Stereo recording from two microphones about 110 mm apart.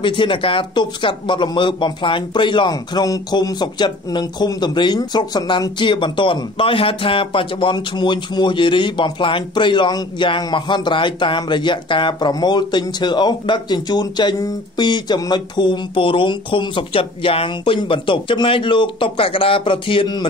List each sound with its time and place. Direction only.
0.0 s a man's voice: 50° left (ahead or behind)